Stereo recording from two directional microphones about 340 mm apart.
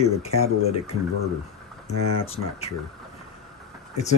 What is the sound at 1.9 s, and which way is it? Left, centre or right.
Speech, left.